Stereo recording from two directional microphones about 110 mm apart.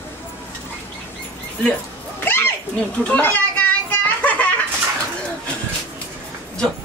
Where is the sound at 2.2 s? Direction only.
20° left (ahead or behind).